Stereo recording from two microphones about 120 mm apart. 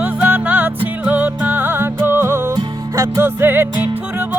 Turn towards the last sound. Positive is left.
turn(degrees=-15)  # may be behind; listen again after turning